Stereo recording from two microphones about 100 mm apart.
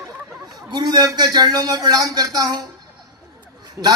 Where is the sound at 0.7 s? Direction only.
45° right (ahead or behind).